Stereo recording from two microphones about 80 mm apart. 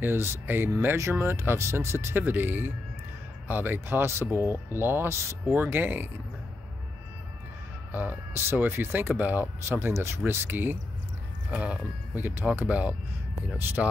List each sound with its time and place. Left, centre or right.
0.0 s speech: right
5.5 s speech: right
7.9 s speech: right